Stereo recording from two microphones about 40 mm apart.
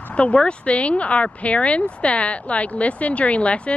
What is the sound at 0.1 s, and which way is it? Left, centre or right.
Speech, left.